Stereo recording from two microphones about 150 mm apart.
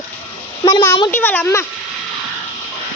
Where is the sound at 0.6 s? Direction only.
20° left (ahead or behind).